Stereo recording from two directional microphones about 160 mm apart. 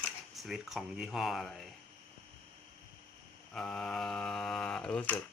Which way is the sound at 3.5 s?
5° left (ahead or behind).